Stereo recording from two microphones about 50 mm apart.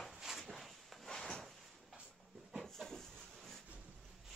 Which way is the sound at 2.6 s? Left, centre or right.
Centre.